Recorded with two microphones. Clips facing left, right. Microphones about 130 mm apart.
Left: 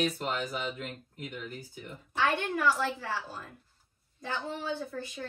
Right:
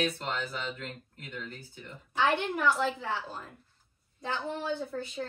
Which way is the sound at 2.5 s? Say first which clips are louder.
Right 1 dB; 20° right (ahead or behind).